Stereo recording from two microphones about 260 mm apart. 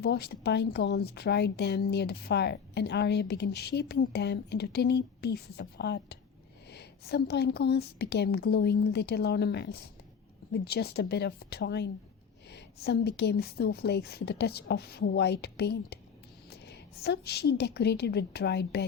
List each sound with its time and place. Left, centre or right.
0.0 s a woman's voice: left